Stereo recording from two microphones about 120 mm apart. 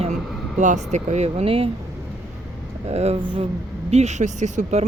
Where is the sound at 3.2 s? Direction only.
45° right (ahead or behind).